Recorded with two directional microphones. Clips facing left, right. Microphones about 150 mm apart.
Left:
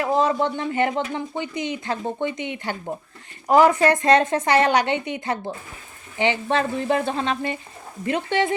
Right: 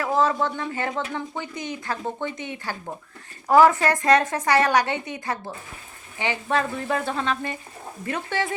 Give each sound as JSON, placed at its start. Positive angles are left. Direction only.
{"t": 0.0, "sound": "speech", "side_deg": 20}